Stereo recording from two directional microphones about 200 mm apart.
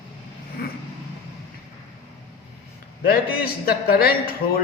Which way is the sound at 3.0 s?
50° left (ahead or behind).